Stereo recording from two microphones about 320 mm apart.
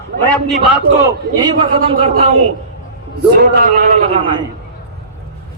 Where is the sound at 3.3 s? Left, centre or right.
Right.